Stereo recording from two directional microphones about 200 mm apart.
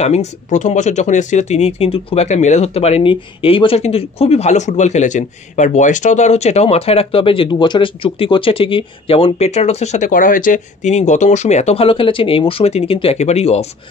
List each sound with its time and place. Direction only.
0.0 s speech: 35° left (ahead or behind)